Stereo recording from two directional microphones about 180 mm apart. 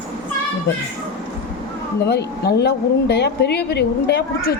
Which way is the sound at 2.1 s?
65° left (ahead or behind).